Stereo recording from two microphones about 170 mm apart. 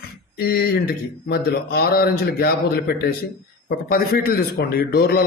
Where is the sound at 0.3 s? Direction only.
65° left (ahead or behind).